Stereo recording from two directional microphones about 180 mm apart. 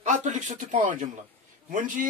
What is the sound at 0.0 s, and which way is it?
A man's voice, 45° right (ahead or behind).